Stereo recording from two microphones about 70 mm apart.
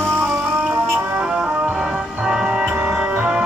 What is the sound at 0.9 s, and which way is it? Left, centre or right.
Music, right.